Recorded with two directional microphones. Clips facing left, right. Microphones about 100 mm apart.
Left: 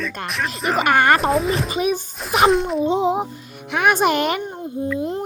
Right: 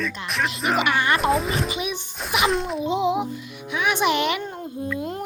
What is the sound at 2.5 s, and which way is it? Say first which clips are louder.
Speech: left 6 dB; centre (ahead or behind).